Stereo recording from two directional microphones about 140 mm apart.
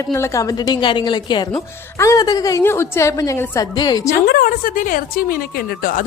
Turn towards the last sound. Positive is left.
turn(degrees=85)